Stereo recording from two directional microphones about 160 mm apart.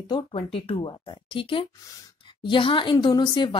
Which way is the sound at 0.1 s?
35° left (ahead or behind).